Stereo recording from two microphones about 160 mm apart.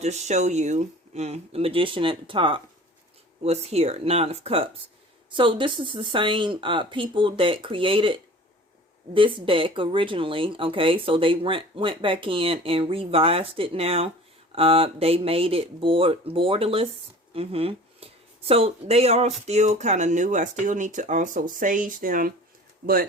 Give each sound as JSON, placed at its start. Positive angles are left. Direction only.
{"t": 0.0, "sound": "speech", "side_deg": -45}